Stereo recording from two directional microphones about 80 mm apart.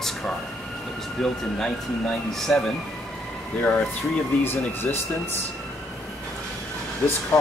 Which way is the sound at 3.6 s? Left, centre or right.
Centre.